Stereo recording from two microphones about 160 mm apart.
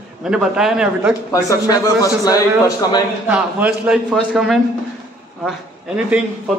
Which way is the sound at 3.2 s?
5° right (ahead or behind).